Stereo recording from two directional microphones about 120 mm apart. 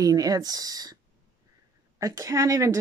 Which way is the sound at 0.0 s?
30° right (ahead or behind).